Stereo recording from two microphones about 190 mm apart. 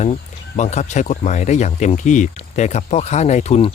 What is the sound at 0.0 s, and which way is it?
Speech, 40° left (ahead or behind).